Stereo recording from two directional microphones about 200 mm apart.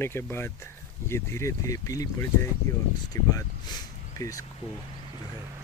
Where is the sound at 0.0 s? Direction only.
10° left (ahead or behind).